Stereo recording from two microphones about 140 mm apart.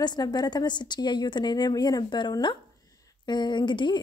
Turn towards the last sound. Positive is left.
turn(degrees=35)  # may be behind; listen again after turning